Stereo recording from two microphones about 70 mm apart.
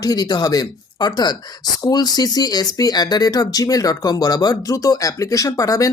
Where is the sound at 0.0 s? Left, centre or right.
Left.